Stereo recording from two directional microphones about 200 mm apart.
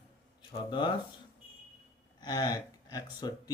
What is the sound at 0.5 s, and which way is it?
Speech, 25° left (ahead or behind).